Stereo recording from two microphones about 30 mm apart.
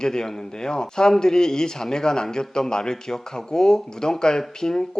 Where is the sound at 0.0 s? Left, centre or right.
Left.